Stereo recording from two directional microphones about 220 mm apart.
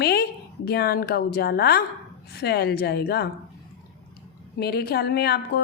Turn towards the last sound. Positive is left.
turn(degrees=45)  # may be behind; listen again after turning